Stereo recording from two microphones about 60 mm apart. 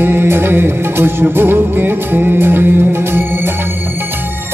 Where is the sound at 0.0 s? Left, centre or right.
Right.